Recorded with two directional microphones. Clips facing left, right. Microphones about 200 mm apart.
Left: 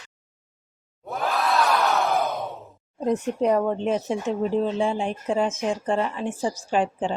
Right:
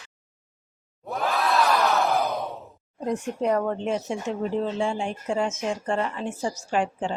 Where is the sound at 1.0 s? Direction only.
Centre (ahead or behind).